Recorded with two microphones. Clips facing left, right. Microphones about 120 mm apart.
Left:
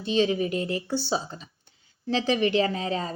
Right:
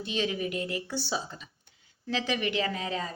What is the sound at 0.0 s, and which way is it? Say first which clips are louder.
A woman's voice: left 7 dB; 30° left (ahead or behind).